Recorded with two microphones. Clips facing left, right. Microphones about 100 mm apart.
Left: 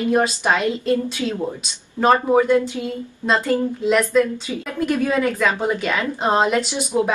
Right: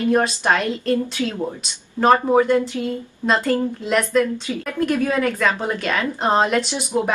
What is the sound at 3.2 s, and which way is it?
A woman's voice, centre (ahead or behind).